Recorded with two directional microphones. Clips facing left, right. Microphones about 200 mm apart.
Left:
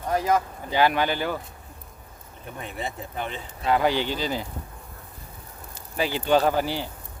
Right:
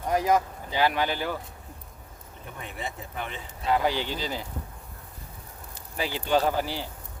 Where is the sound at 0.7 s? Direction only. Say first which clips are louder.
Left 3 dB; 60° left (ahead or behind).